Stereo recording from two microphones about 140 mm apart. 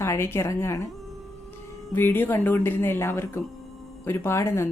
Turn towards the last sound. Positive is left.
turn(degrees=20)  # may be behind; listen again after turning